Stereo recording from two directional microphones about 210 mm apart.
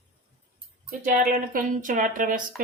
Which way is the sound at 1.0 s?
40° right (ahead or behind).